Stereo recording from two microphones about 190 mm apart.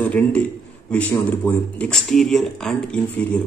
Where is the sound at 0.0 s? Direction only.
10° left (ahead or behind).